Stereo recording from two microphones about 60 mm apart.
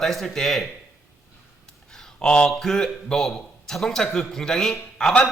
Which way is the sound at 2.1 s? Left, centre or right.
Centre.